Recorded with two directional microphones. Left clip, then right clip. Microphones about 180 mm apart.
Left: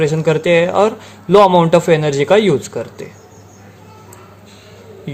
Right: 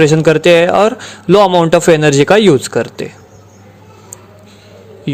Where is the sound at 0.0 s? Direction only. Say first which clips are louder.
Right 6 dB; 45° right (ahead or behind).